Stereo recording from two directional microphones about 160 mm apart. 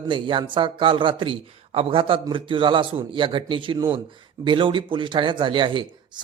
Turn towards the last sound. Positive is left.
turn(degrees=-30)  # may be behind; listen again after turning